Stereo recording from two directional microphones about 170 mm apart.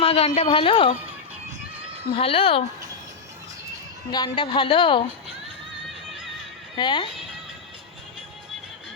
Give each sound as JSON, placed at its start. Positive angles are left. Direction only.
{"t": 0.0, "sound": "a woman's voice", "side_deg": 35}
{"t": 2.1, "sound": "a woman's voice", "side_deg": 35}
{"t": 4.1, "sound": "speech", "side_deg": 25}
{"t": 6.7, "sound": "speech", "side_deg": 25}